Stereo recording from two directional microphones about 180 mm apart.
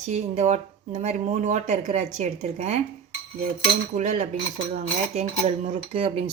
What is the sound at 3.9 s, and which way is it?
Dishes, 40° right (ahead or behind).